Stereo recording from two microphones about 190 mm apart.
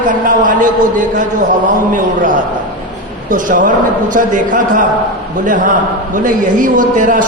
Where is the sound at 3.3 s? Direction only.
45° right (ahead or behind).